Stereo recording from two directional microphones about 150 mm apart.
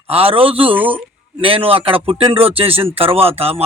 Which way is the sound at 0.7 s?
10° right (ahead or behind).